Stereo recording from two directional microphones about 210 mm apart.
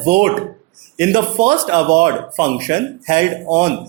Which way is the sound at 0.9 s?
15° right (ahead or behind).